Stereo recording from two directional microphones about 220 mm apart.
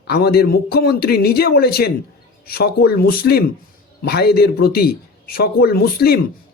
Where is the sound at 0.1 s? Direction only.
45° left (ahead or behind).